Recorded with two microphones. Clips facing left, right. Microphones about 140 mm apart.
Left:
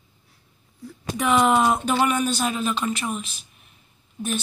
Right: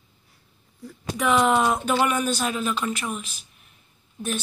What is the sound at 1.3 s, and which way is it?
Speech, 5° left (ahead or behind).